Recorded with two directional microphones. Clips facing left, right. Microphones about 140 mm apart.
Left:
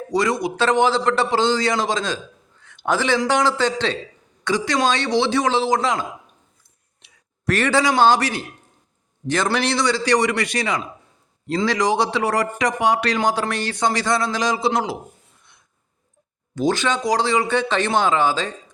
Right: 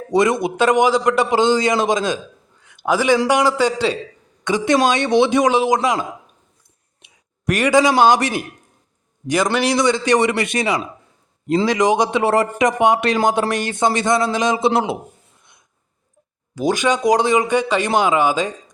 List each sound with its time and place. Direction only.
0.1 s a man's voice: 20° right (ahead or behind)
2.6 s a sound: 10° right (ahead or behind)
3.2 s a man's voice: 10° right (ahead or behind)
4.4 s a man's voice: 20° right (ahead or behind)
9.7 s speech: 20° right (ahead or behind)
16.6 s a man's voice: 15° right (ahead or behind)